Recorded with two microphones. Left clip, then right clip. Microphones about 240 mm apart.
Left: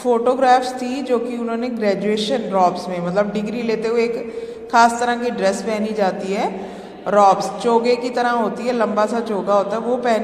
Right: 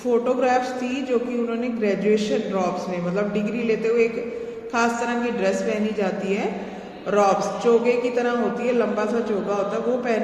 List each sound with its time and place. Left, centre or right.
0.0 s a man's voice: left
1.8 s a man's voice: left